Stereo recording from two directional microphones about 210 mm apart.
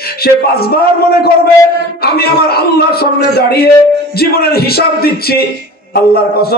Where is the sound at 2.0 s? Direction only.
45° left (ahead or behind).